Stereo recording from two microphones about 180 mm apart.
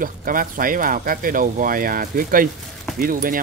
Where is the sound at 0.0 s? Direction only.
50° right (ahead or behind).